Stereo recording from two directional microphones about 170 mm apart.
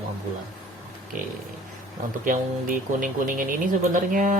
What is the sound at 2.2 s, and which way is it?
Speech, 50° right (ahead or behind).